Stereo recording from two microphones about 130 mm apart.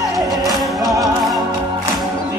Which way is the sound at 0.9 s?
Centre (ahead or behind).